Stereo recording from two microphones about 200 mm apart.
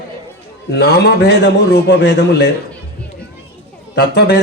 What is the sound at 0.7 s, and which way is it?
A man's voice, 55° left (ahead or behind).